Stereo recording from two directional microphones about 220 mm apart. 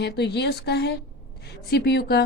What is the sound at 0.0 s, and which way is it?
A woman's voice, 50° left (ahead or behind).